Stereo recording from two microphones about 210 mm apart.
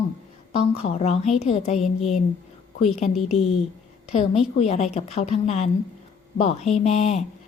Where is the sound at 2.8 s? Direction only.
30° left (ahead or behind).